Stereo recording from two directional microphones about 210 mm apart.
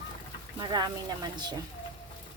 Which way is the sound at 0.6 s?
20° right (ahead or behind).